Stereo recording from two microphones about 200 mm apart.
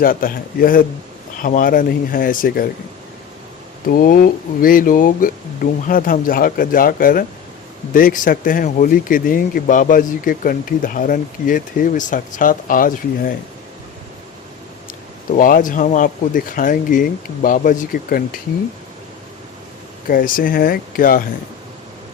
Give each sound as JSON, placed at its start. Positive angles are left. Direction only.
{"t": 0.0, "sound": "speech", "side_deg": 45}
{"t": 3.8, "sound": "speech", "side_deg": 45}
{"t": 15.4, "sound": "speech", "side_deg": 45}
{"t": 20.1, "sound": "speech", "side_deg": 45}